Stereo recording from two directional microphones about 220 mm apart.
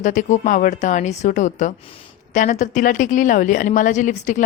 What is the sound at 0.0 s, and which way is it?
A woman's voice, 35° left (ahead or behind).